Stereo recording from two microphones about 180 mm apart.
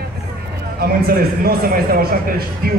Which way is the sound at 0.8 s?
55° right (ahead or behind).